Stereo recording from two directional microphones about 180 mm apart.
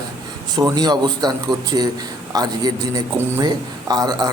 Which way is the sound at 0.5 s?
20° right (ahead or behind).